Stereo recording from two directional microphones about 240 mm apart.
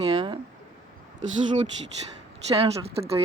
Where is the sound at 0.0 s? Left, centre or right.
Right.